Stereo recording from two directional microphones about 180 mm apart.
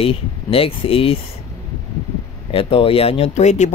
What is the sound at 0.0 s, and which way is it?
Speech, 30° left (ahead or behind).